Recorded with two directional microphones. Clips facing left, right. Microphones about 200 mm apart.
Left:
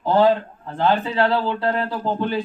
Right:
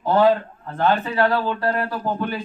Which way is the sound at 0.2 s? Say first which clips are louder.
Even; 15° left (ahead or behind).